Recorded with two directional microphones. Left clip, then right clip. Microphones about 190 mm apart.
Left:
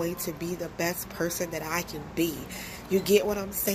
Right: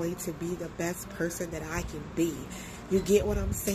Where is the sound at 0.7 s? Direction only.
15° right (ahead or behind).